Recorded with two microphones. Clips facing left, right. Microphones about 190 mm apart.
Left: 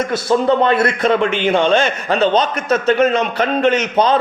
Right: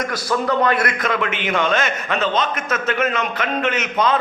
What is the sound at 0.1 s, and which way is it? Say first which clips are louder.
A man's voice: left 6 dB; 25° left (ahead or behind).